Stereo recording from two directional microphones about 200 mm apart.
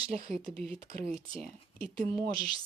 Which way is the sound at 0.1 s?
30° right (ahead or behind).